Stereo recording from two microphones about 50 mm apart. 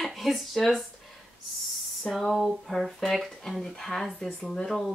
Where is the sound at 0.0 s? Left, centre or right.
Centre.